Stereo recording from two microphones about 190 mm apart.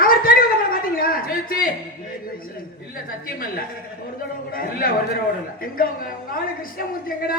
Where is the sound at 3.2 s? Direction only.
50° left (ahead or behind).